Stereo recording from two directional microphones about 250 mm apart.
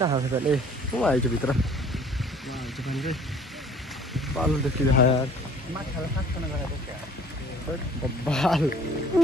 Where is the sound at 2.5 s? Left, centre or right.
Centre.